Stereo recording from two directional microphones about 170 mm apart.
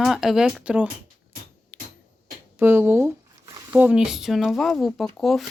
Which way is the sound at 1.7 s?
10° right (ahead or behind).